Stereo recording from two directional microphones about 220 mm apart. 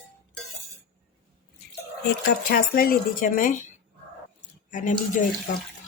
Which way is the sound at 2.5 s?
40° left (ahead or behind).